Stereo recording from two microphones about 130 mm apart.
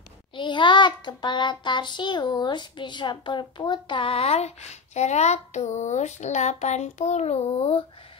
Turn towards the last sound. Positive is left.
turn(degrees=50)  # may be behind; listen again after turning